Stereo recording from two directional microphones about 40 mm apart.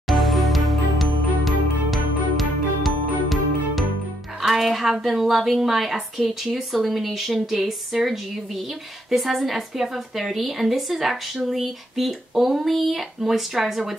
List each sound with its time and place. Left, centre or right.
0.1 s music: centre
4.4 s a woman's voice: centre